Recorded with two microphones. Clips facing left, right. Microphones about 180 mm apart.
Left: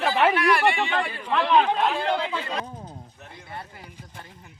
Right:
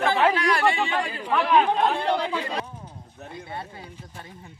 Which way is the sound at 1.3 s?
10° right (ahead or behind).